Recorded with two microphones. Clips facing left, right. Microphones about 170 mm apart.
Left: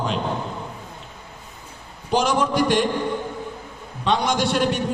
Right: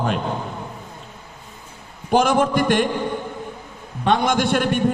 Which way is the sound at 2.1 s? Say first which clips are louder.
Right 3 dB; 55° right (ahead or behind).